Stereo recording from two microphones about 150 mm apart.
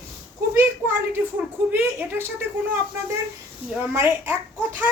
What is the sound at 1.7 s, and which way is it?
A woman's voice, 10° right (ahead or behind).